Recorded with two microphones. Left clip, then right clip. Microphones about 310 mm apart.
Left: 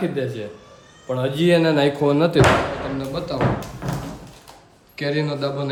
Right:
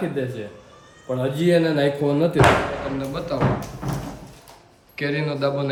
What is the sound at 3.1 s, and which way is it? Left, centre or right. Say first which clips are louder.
Speech: even; centre.